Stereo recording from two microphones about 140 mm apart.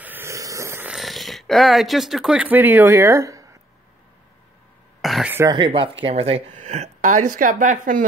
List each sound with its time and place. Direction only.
0.0 s a sound: 15° right (ahead or behind)
0.8 s speech: centre (ahead or behind); by 3.5 s 20° right (ahead or behind)
5.0 s throat clearing: centre (ahead or behind)
5.5 s speech: 40° right (ahead or behind); by 8.0 s 70° right (ahead or behind)